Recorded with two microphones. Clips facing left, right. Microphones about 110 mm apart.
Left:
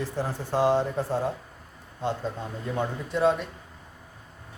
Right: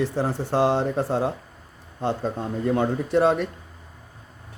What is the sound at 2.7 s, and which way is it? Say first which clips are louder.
Speech: right 7 dB; 70° right (ahead or behind).